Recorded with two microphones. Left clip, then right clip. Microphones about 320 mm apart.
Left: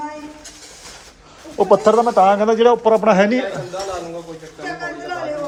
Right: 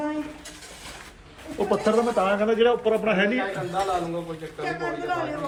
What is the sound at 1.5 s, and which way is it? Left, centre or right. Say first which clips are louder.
Speech: left 9 dB; centre.